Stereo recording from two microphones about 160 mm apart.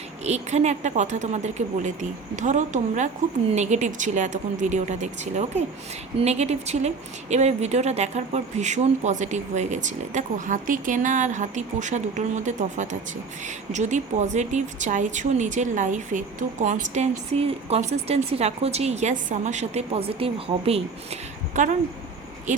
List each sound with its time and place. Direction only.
0.3 s a woman's voice: 45° right (ahead or behind)